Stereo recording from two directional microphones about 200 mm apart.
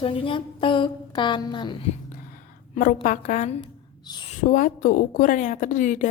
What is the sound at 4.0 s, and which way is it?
Speech, 20° left (ahead or behind).